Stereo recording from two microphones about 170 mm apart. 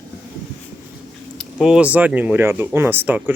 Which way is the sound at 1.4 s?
Centre (ahead or behind).